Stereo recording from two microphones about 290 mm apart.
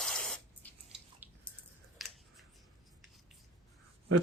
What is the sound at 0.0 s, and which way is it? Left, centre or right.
Spray, centre.